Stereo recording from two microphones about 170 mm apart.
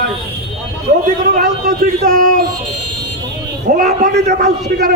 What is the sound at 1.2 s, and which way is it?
Speech, 65° right (ahead or behind).